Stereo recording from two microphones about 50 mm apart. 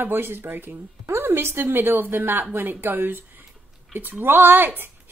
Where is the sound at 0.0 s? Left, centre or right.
Right.